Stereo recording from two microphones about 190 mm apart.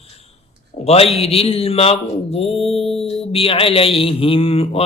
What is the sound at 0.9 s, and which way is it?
A man's voice, 30° left (ahead or behind).